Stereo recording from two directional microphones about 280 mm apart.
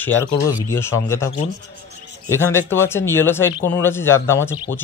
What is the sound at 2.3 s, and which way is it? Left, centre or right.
Speech, centre.